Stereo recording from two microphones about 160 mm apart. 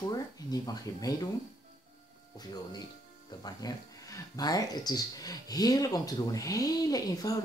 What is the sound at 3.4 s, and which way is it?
Speech, 25° left (ahead or behind).